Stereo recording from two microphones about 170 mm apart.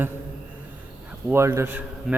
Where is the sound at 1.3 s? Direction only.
15° right (ahead or behind).